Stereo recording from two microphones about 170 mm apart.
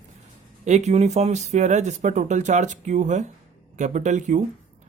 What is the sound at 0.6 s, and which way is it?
Speech, 40° right (ahead or behind).